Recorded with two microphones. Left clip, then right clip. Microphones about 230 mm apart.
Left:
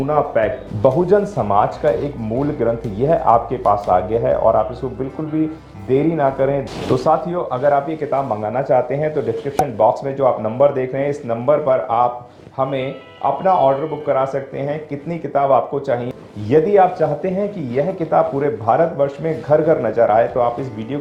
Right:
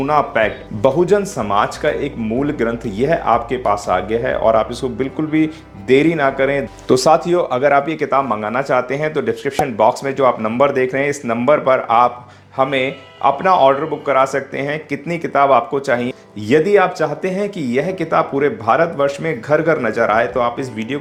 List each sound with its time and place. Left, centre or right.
0.0 s speech: right